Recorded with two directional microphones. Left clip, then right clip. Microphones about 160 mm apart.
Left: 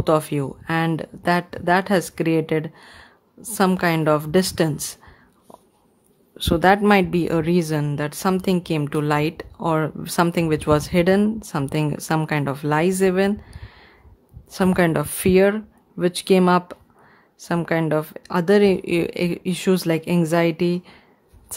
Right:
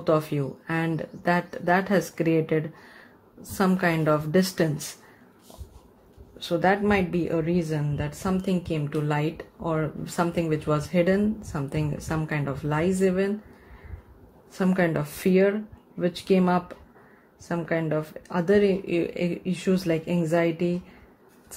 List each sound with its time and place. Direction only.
0.0 s speech: 40° left (ahead or behind)
6.3 s a woman's voice: 45° left (ahead or behind)
14.6 s a woman's voice: 45° left (ahead or behind)